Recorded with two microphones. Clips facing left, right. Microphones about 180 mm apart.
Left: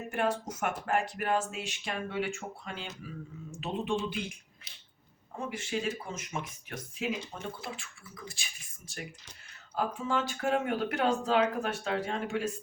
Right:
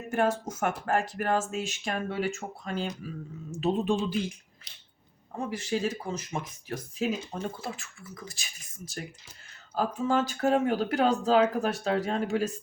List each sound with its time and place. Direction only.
0.1 s speech: 45° right (ahead or behind)
4.7 s a sound: 5° left (ahead or behind)
5.5 s speech: 40° right (ahead or behind)